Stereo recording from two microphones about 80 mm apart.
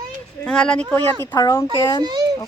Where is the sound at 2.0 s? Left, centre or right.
Right.